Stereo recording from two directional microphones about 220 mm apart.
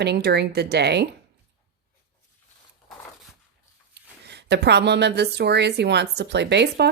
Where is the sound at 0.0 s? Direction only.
50° right (ahead or behind).